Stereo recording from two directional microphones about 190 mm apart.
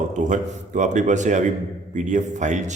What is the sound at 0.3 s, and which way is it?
A man's voice, 40° right (ahead or behind).